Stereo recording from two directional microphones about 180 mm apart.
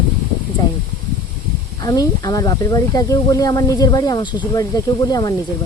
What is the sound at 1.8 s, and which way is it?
Speech, 20° left (ahead or behind).